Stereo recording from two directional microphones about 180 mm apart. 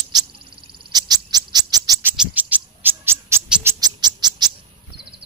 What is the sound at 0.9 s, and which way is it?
Bird, 20° right (ahead or behind).